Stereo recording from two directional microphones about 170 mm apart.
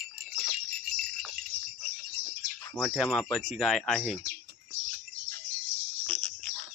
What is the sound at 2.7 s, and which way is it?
Speech, centre (ahead or behind).